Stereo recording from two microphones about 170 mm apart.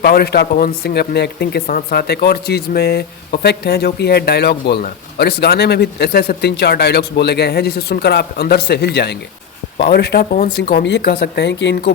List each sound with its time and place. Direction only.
0.0 s speech: 70° left (ahead or behind)